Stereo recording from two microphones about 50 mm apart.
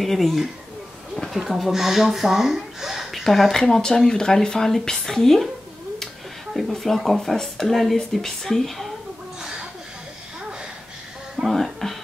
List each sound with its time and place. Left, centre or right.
0.0 s speech: centre
6.5 s speech: centre
11.4 s music: centre